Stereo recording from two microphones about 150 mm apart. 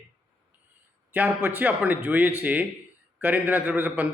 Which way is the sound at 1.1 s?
10° right (ahead or behind).